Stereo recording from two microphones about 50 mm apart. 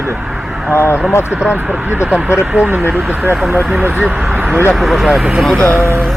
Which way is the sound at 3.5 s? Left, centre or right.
Right.